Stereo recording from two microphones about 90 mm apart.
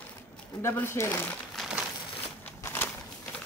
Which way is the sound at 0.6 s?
25° left (ahead or behind).